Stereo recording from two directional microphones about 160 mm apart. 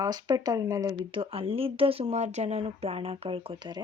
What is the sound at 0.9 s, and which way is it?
Speech, 35° right (ahead or behind).